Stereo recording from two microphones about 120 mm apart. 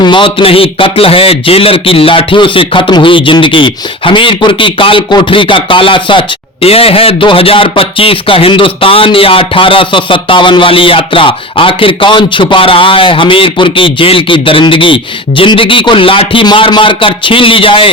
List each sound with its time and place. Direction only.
0.0 s a man's voice: 45° left (ahead or behind)